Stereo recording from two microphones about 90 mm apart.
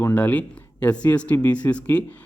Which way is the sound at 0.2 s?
15° left (ahead or behind).